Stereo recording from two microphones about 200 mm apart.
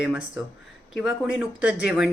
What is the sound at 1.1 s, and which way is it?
Speech, 75° left (ahead or behind).